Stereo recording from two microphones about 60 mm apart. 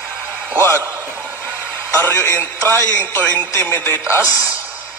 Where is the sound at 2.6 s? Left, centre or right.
Left.